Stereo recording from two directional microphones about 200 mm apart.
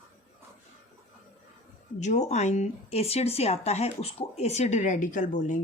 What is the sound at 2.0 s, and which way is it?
Speech, 35° left (ahead or behind).